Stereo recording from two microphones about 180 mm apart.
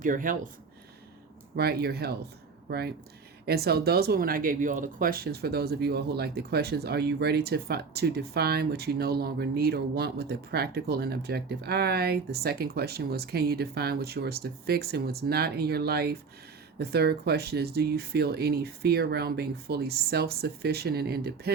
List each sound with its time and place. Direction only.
0.0 s speech: 45° right (ahead or behind)
1.5 s speech: 60° right (ahead or behind)